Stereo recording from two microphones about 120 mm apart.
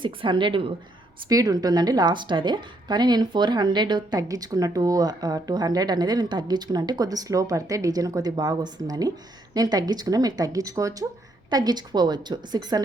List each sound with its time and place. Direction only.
0.0 s a woman's voice: 45° right (ahead or behind)
1.3 s speech: 30° right (ahead or behind)